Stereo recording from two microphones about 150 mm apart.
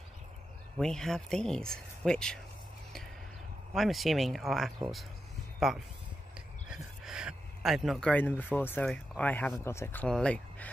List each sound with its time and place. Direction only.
0.7 s speech: 5° left (ahead or behind)
3.7 s speech: centre (ahead or behind); by 10.0 s 15° left (ahead or behind)
10.0 s speech: 5° left (ahead or behind)